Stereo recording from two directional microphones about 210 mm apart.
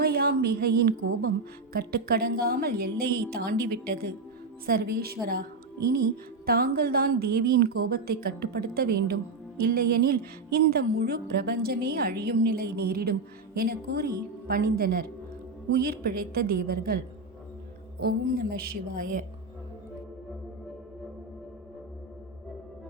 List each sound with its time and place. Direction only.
0.0 s a woman's voice: 45° right (ahead or behind)
18.0 s a woman's voice: 45° right (ahead or behind)